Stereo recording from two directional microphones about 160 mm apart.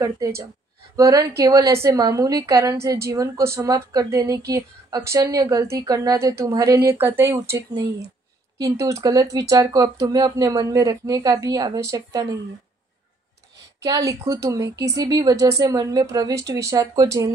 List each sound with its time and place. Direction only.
0.9 s speech: 20° right (ahead or behind)
13.8 s speech: 20° right (ahead or behind)